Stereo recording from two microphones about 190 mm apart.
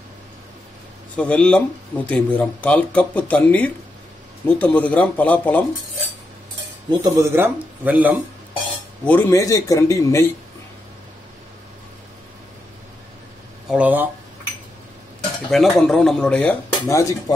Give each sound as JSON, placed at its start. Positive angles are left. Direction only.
{"t": 1.1, "sound": "speech", "side_deg": 5}
{"t": 6.9, "sound": "speech", "side_deg": -20}
{"t": 9.0, "sound": "speech", "side_deg": 10}
{"t": 13.7, "sound": "speech", "side_deg": -5}
{"t": 15.5, "sound": "speech", "side_deg": 0}